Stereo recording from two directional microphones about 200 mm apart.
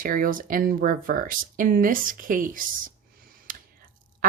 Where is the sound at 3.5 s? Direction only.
45° right (ahead or behind).